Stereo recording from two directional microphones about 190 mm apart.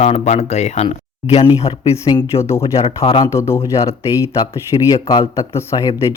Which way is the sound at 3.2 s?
15° left (ahead or behind).